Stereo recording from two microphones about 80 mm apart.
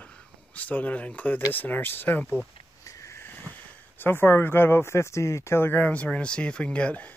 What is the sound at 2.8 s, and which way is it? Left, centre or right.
Sniff, left.